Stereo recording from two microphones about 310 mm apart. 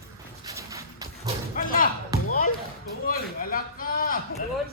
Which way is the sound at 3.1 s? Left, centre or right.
Left.